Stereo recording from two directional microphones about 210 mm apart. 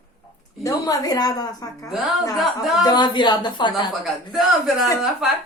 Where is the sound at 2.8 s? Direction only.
20° left (ahead or behind).